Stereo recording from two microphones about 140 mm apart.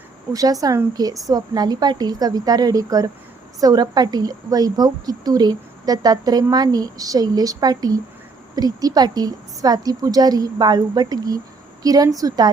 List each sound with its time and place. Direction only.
0.3 s a woman's voice: 25° right (ahead or behind)